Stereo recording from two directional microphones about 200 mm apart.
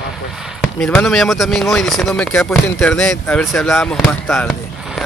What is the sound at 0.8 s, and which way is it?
Speech, centre (ahead or behind).